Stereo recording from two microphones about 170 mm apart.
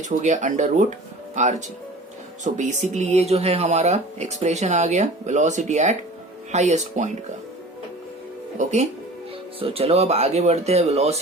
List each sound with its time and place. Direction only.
0.0 s speech: 45° right (ahead or behind)
8.5 s speech: 40° right (ahead or behind)